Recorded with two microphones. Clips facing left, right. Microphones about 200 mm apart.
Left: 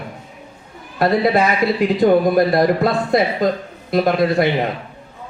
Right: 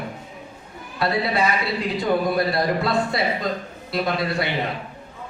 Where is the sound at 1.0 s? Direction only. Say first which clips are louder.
Left 7 dB; 50° left (ahead or behind).